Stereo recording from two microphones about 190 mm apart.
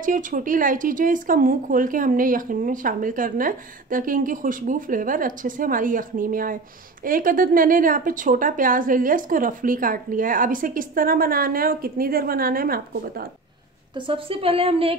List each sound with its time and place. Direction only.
0.0 s speech: 45° right (ahead or behind)
13.9 s a woman's voice: 25° right (ahead or behind)